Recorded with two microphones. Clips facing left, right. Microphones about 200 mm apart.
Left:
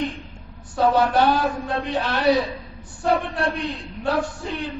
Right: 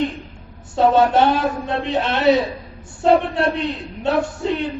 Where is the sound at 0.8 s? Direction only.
25° right (ahead or behind).